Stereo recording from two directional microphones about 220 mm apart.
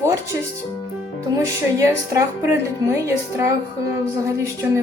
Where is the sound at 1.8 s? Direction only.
15° right (ahead or behind).